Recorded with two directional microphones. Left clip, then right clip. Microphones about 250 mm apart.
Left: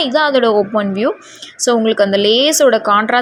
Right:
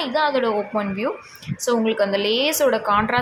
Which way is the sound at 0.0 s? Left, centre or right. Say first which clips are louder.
Left 7 dB; left.